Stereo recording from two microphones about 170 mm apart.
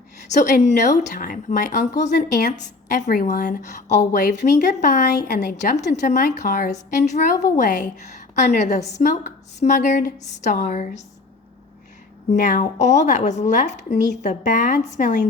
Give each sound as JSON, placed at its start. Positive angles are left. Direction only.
{"t": 0.3, "sound": "speech", "side_deg": 50}
{"t": 7.3, "sound": "a woman's voice", "side_deg": 20}
{"t": 7.6, "sound": "speech", "side_deg": 50}
{"t": 12.3, "sound": "speech", "side_deg": 50}